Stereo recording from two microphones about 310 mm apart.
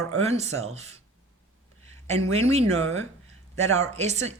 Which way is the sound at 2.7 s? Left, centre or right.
Right.